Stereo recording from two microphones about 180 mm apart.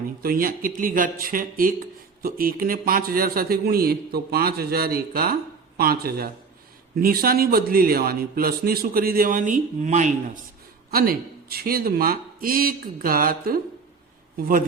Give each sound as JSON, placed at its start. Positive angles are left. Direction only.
{"t": 0.2, "sound": "speech", "side_deg": -55}
{"t": 10.9, "sound": "speech", "side_deg": -55}